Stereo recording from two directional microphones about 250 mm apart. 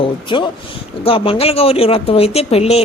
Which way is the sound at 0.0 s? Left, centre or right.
Centre.